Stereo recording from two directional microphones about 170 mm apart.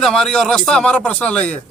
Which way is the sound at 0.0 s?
5° left (ahead or behind).